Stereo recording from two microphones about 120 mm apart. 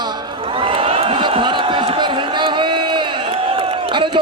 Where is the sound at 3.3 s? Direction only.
55° right (ahead or behind).